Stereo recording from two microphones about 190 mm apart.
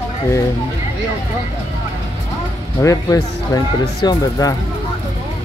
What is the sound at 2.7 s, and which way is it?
Speech, 15° left (ahead or behind).